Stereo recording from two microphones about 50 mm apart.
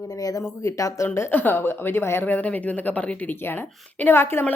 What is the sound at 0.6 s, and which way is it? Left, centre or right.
Speech, left.